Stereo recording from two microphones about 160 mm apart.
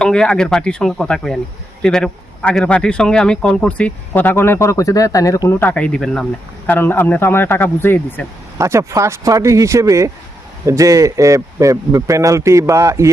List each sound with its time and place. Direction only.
0.0 s speech: 5° left (ahead or behind)
6.7 s speech: 15° left (ahead or behind)
8.5 s speech: 20° right (ahead or behind)